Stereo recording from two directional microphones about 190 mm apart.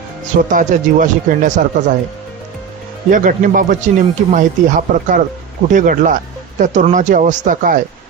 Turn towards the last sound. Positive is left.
turn(degrees=-45)  # may be behind; listen again after turning